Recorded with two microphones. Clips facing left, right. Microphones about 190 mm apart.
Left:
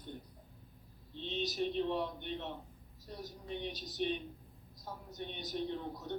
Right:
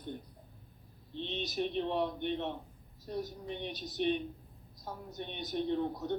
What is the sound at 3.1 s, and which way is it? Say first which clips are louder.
Speech: right 5 dB; 60° right (ahead or behind).